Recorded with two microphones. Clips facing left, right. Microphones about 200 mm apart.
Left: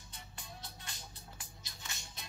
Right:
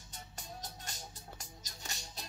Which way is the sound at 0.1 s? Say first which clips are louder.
Right 4 dB; 40° right (ahead or behind).